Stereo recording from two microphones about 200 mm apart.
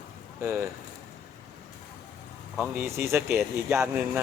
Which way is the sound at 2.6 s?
10° right (ahead or behind).